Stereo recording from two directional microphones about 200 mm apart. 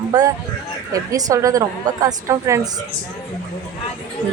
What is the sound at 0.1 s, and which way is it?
A woman's voice, 15° right (ahead or behind).